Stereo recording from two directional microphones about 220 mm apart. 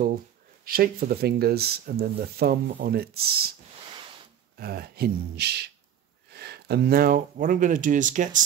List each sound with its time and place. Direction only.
0.7 s speech: 40° right (ahead or behind)
4.6 s speech: 45° right (ahead or behind)